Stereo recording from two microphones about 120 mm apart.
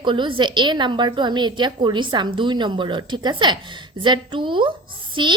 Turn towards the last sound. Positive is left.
turn(degrees=-40)  # may be behind; listen again after turning